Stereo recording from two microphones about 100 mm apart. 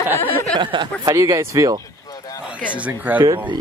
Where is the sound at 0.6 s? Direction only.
55° right (ahead or behind).